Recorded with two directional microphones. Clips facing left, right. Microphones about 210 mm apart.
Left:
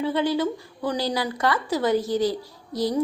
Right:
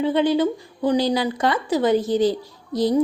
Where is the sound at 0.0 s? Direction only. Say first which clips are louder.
Right 4 dB; 20° right (ahead or behind).